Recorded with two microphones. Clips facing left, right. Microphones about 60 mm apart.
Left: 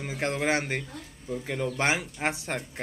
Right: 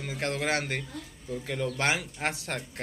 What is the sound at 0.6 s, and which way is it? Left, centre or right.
A man's voice, centre.